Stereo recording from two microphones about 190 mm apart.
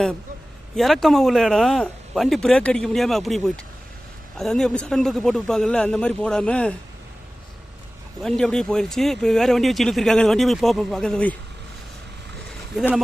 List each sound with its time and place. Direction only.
0.8 s speech: centre (ahead or behind)
8.2 s speech: 5° left (ahead or behind)